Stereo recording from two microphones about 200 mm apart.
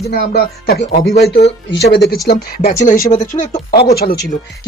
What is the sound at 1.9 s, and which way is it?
Speech, 55° left (ahead or behind).